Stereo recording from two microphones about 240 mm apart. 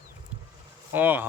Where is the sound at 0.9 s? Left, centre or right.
Centre.